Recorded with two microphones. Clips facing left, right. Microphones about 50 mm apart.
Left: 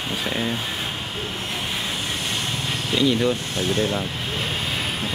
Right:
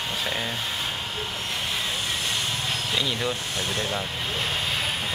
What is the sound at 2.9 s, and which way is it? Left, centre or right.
Speech, centre.